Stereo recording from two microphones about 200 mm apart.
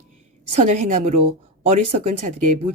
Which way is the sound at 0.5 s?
35° right (ahead or behind).